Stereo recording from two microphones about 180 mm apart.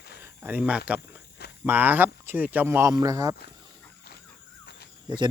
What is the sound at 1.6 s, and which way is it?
Speech, 10° right (ahead or behind).